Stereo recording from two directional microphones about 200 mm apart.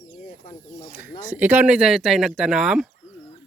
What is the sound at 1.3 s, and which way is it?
Speech, 10° right (ahead or behind).